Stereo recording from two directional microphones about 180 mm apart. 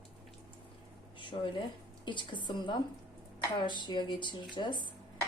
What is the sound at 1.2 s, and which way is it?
A woman's voice, 25° left (ahead or behind).